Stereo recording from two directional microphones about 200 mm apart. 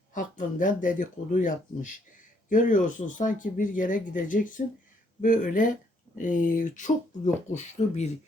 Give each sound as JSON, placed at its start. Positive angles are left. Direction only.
{"t": 0.1, "sound": "speech", "side_deg": 40}